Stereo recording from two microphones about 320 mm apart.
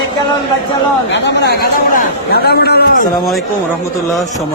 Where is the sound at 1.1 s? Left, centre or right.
Left.